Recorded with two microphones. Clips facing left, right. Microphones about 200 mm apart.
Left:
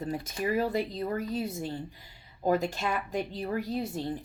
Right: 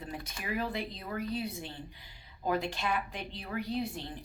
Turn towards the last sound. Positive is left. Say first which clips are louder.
# left 3 dB
turn(degrees=40)  # may be behind; listen again after turning